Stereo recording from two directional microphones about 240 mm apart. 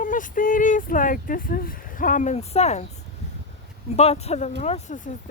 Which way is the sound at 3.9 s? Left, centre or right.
Left.